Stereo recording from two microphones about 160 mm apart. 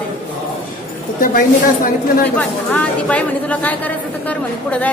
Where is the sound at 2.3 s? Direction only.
10° left (ahead or behind).